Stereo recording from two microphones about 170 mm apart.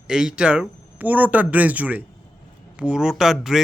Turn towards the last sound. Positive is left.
turn(degrees=-5)  # may be behind; listen again after turning